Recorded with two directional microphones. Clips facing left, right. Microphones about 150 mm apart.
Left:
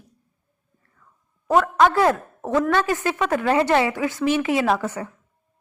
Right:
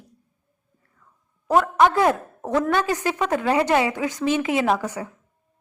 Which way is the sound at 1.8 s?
20° right (ahead or behind).